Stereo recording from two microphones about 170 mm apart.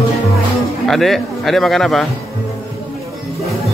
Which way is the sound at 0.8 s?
Centre (ahead or behind).